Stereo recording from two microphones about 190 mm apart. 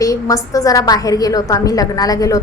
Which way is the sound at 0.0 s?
15° left (ahead or behind).